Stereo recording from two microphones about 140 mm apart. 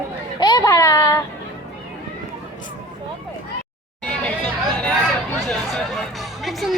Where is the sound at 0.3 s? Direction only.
30° left (ahead or behind).